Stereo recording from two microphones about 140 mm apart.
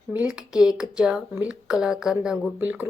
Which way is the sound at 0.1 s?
10° right (ahead or behind).